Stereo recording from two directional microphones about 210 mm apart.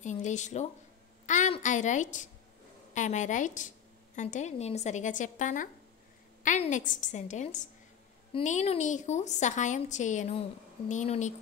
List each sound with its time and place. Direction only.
0.0 s a woman's voice: 35° left (ahead or behind)
1.2 s a sound: 35° left (ahead or behind)
2.9 s a woman's voice: 35° left (ahead or behind)